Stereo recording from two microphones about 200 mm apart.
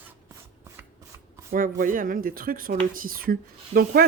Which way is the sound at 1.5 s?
45° right (ahead or behind).